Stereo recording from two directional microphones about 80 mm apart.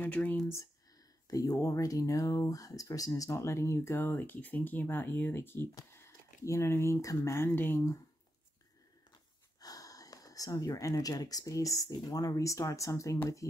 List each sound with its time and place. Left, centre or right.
0.0 s speech: left
1.2 s speech: left
9.6 s speech: left